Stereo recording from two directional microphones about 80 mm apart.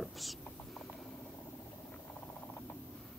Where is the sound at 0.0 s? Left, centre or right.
Centre.